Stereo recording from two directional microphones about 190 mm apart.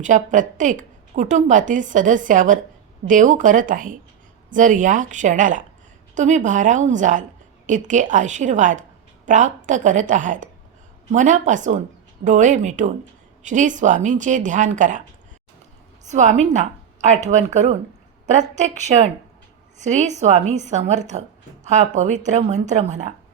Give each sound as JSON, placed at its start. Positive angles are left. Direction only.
{"t": 0.0, "sound": "a woman's voice", "side_deg": -40}
{"t": 16.0, "sound": "a woman's voice", "side_deg": -40}